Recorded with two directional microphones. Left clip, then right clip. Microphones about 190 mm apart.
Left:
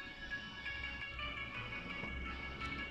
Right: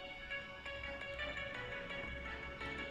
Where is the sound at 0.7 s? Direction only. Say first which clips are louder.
Left 2 dB; 40° right (ahead or behind).